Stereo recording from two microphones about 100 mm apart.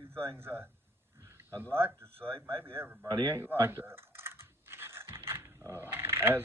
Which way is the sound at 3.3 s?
25° right (ahead or behind).